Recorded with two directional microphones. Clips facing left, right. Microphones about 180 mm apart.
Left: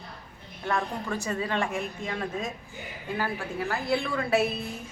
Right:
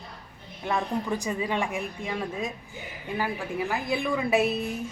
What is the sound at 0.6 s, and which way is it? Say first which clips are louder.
A woman's voice: right 2 dB; 15° right (ahead or behind).